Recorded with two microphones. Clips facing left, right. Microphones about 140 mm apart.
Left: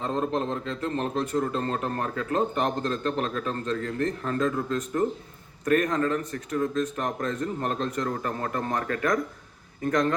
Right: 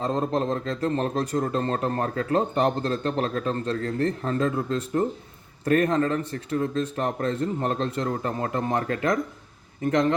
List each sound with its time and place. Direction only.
0.0 s a man's voice: 35° right (ahead or behind)